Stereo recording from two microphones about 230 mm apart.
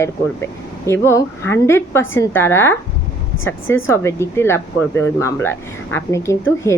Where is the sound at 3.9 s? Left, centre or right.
Centre.